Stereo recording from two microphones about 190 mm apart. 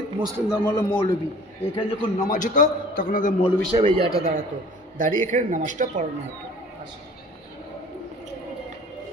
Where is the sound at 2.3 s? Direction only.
40° left (ahead or behind).